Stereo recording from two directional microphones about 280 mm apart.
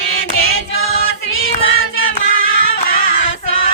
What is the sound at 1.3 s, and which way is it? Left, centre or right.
Cat, left.